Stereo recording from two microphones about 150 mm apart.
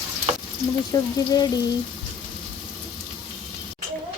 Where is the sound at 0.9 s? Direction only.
25° left (ahead or behind).